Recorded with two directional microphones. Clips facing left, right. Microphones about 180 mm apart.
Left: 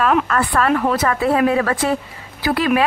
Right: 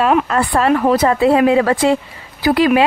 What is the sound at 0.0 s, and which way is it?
Speech, 30° right (ahead or behind).